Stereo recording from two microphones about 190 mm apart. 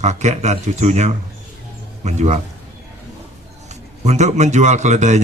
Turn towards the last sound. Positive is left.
turn(degrees=-40)  # may be behind; listen again after turning